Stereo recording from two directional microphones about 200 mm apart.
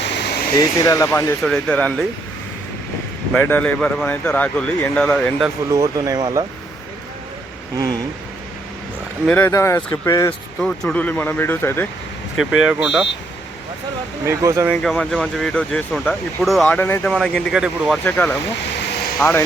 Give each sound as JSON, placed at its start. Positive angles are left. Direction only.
{"t": 0.0, "sound": "air conditioning", "side_deg": 60}
{"t": 0.5, "sound": "speech", "side_deg": 20}
{"t": 3.3, "sound": "speech", "side_deg": 5}
{"t": 5.7, "sound": "speech", "side_deg": -15}
{"t": 9.2, "sound": "speech", "side_deg": 10}
{"t": 10.6, "sound": "speech", "side_deg": 5}
{"t": 12.6, "sound": "speech", "side_deg": -5}
{"t": 14.3, "sound": "speech", "side_deg": -15}
{"t": 14.8, "sound": "speech", "side_deg": 0}
{"t": 18.0, "sound": "speech", "side_deg": 10}